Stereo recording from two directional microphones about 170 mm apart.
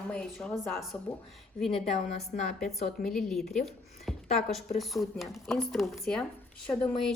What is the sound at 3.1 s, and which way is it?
A woman's voice, 5° left (ahead or behind).